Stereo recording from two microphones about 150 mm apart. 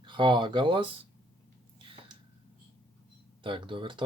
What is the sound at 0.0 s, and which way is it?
Speech, 30° right (ahead or behind).